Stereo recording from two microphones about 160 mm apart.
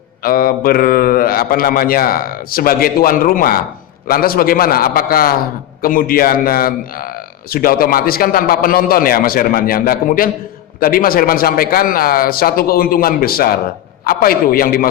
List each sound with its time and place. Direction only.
0.2 s speech: 65° left (ahead or behind)